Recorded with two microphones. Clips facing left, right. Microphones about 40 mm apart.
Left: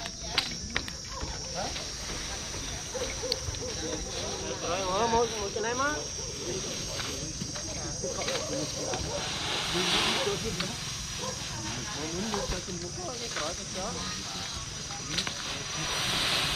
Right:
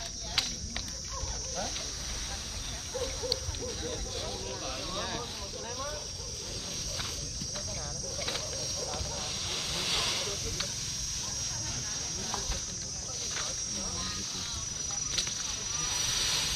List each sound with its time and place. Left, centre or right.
4.6 s vehicle: left
8.5 s vehicle: left
12.2 s a sound: left
15.7 s vehicle: left